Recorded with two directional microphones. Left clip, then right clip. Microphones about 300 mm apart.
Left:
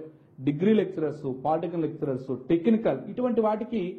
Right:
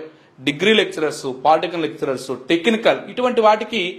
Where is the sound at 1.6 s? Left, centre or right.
Centre.